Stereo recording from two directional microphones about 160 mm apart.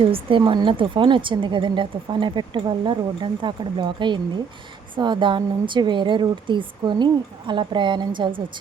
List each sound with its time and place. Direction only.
0.0 s a woman's voice: 35° right (ahead or behind)